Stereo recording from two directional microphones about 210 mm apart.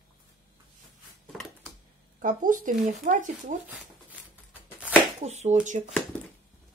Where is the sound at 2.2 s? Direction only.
40° right (ahead or behind).